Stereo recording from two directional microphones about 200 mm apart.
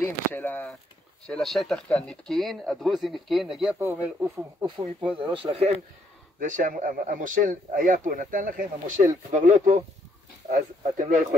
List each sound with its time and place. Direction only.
0.0 s speech: 10° left (ahead or behind)
3.8 s speech: 15° right (ahead or behind)
5.1 s speech: 25° right (ahead or behind)
6.4 s speech: 40° right (ahead or behind)